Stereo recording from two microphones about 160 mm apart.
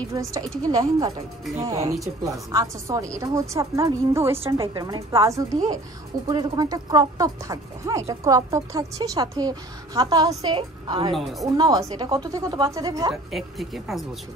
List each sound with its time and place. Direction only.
0.1 s speech: 20° right (ahead or behind)
2.5 s speech: 20° right (ahead or behind)
11.1 s speech: centre (ahead or behind)
11.4 s speech: 25° right (ahead or behind)
13.1 s speech: centre (ahead or behind)